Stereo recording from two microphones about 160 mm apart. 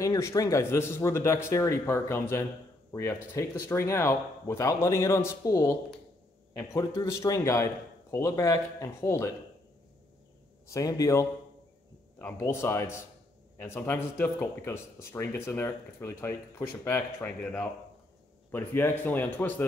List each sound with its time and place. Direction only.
0.0 s a man's voice: 20° left (ahead or behind)
10.7 s a man's voice: 20° left (ahead or behind)